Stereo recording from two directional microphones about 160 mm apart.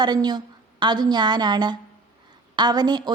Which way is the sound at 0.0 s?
25° right (ahead or behind).